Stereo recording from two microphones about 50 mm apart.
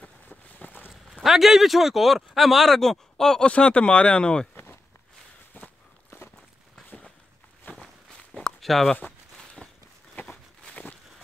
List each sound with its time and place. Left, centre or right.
0.0 s boat: left
1.3 s speech: centre
3.4 s speech: left
5.5 s walk: left
7.7 s walk: left
8.1 s walk: centre
10.2 s a sound: left